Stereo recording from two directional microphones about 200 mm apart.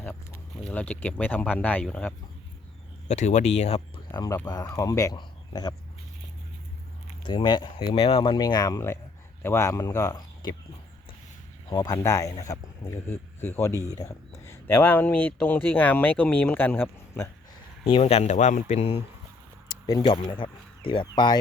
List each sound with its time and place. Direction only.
0.0 s a sound: 10° left (ahead or behind)
0.6 s speech: 5° left (ahead or behind)
3.1 s speech: 35° left (ahead or behind)
4.1 s speech: 15° left (ahead or behind)
7.3 s speech: 20° left (ahead or behind)
11.7 s speech: 20° left (ahead or behind)
17.8 s speech: 30° left (ahead or behind)